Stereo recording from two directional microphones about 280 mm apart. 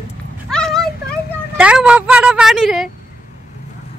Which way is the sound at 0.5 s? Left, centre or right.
Centre.